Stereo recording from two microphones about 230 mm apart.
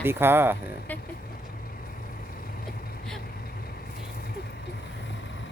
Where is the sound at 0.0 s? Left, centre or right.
Centre.